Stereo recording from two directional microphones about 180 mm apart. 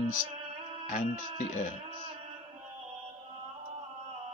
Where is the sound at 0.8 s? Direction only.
45° left (ahead or behind).